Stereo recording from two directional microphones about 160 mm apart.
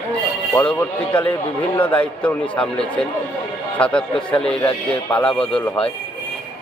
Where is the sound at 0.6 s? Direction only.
10° left (ahead or behind).